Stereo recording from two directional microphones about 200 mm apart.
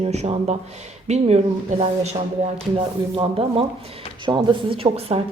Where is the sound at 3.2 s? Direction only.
25° right (ahead or behind).